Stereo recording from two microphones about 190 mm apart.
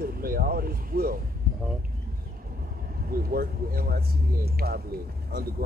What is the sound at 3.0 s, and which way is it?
Speech, 50° right (ahead or behind).